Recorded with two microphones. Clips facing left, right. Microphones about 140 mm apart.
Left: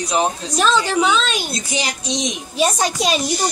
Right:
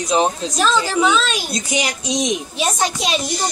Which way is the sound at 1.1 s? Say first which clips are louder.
Right 1 dB; centre (ahead or behind).